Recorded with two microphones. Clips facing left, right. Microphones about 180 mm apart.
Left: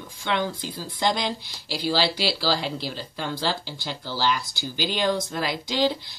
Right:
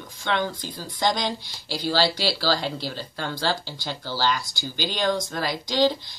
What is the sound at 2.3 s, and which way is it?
Speech, 45° right (ahead or behind).